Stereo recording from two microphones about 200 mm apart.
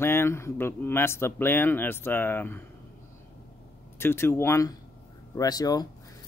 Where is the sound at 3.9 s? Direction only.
10° left (ahead or behind).